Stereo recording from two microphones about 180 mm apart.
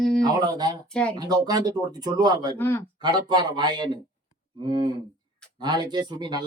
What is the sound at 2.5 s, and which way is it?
Speech, 10° left (ahead or behind).